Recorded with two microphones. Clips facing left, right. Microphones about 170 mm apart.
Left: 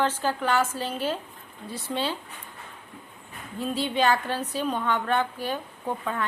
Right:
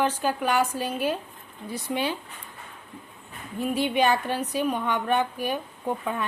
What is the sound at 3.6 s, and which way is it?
A woman's voice, 15° right (ahead or behind).